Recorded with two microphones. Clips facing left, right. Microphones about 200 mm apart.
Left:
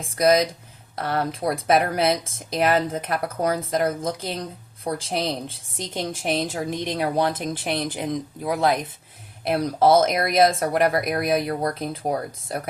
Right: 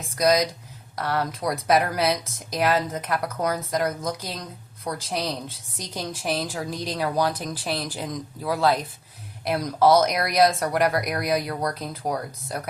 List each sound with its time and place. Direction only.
0.2 s speech: 25° left (ahead or behind)